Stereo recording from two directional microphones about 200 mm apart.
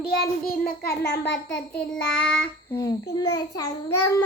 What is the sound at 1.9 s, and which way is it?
Child singing, 5° left (ahead or behind).